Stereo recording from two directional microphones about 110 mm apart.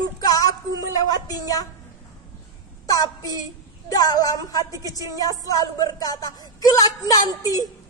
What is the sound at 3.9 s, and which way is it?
Speech, 35° left (ahead or behind).